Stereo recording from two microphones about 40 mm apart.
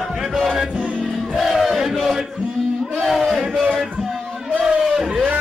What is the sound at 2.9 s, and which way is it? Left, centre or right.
Battle cry, centre.